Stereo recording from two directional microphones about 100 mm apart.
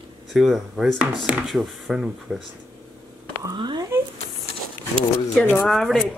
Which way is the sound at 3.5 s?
50° right (ahead or behind).